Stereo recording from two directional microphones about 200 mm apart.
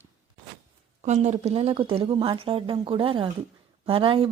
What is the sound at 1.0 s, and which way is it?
Speech, 35° right (ahead or behind).